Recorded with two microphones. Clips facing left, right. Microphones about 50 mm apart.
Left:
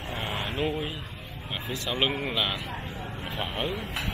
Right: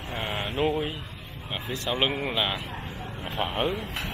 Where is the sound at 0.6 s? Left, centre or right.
Centre.